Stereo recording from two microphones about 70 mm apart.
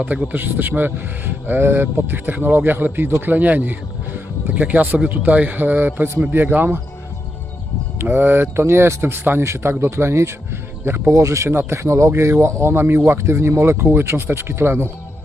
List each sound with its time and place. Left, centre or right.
0.0 s speech: right
7.9 s speech: right
9.4 s speech: right